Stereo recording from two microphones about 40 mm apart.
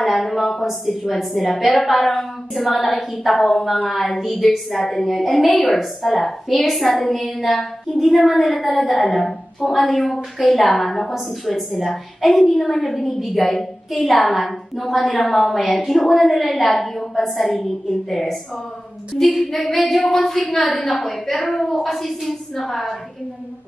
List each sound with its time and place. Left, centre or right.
0.0 s a woman's voice: centre
10.7 s a woman's voice: centre
19.2 s speech: left
19.7 s a woman's voice: centre